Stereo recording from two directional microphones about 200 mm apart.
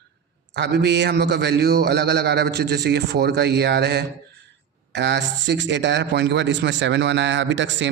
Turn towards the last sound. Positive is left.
turn(degrees=-65)  # may be behind; listen again after turning